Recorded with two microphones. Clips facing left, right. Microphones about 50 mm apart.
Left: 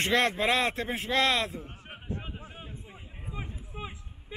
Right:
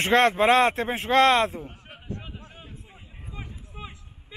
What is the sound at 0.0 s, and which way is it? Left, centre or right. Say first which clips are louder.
A man's voice: right 6 dB; right.